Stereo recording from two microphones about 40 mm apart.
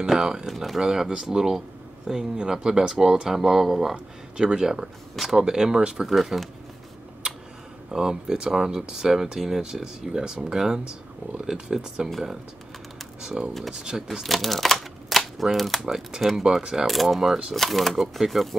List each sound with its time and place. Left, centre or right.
0.0 s speech: centre
6.0 s speech: centre
7.9 s speech: centre
13.2 s speech: centre
14.2 s a sound: centre
15.5 s speech: centre
15.8 s speech: centre
16.2 s speech: centre